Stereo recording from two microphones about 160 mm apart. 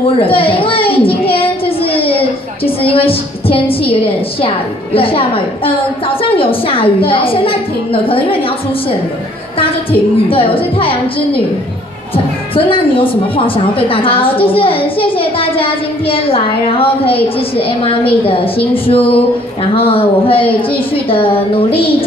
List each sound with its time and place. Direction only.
0.2 s a woman's voice: 35° left (ahead or behind)
1.3 s child singing: 35° left (ahead or behind)
2.9 s a woman's voice: 35° left (ahead or behind)
9.6 s a woman's voice: 35° left (ahead or behind)
12.5 s a woman's voice: 35° left (ahead or behind)